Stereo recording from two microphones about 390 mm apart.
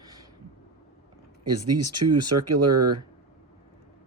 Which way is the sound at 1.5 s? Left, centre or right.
Right.